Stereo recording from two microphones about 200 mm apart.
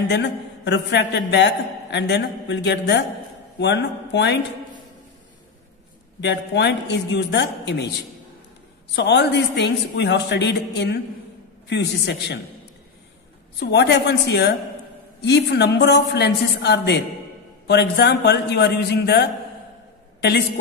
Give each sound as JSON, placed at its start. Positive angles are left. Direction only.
{"t": 0.1, "sound": "a man's voice", "side_deg": 60}
{"t": 6.2, "sound": "a man's voice", "side_deg": 60}
{"t": 13.6, "sound": "a man's voice", "side_deg": 55}